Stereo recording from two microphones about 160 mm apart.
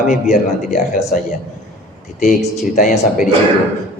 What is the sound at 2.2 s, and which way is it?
Speech, 50° left (ahead or behind).